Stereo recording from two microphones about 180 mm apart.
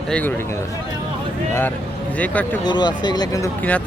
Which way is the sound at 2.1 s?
10° left (ahead or behind).